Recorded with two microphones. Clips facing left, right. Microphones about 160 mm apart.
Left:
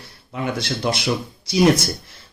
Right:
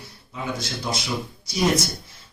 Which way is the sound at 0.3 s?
65° left (ahead or behind).